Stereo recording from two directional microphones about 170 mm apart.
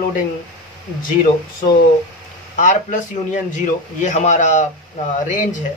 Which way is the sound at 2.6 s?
45° left (ahead or behind).